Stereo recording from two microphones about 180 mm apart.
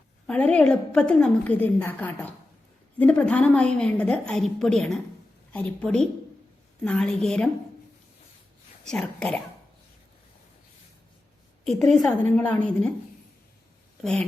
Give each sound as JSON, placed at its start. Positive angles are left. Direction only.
{"t": 0.3, "sound": "a woman's voice", "side_deg": 5}
{"t": 8.8, "sound": "a woman's voice", "side_deg": 5}
{"t": 11.6, "sound": "a woman's voice", "side_deg": 0}
{"t": 14.0, "sound": "a woman's voice", "side_deg": 5}